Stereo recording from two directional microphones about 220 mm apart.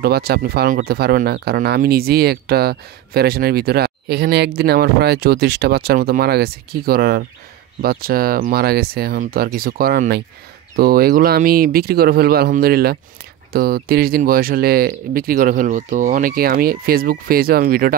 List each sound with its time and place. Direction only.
0.0 s speech: 45° right (ahead or behind)